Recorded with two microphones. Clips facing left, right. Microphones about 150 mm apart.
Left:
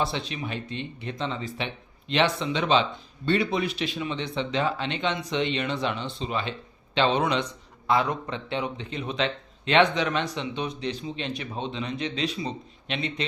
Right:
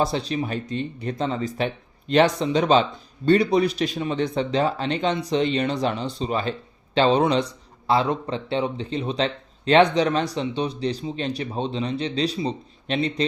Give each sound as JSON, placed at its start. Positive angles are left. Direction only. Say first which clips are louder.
{"t": 0.0, "sound": "a man's voice", "louder": "right 6 dB", "side_deg": -40}